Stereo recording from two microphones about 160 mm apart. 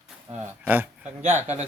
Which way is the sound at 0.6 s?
10° right (ahead or behind).